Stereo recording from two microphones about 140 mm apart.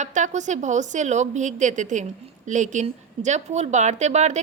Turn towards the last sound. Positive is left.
turn(degrees=-55)  # may be behind; listen again after turning